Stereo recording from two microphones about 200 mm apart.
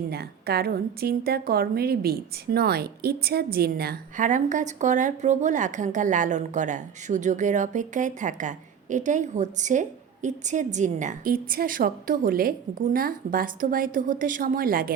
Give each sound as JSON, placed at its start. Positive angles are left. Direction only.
{"t": 0.1, "sound": "a woman's voice", "side_deg": -50}